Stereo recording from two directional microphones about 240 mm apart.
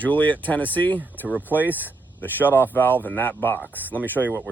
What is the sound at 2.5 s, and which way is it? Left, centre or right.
Speech, centre.